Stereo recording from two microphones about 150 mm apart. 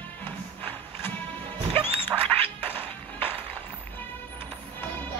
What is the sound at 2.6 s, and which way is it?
Music, 15° left (ahead or behind).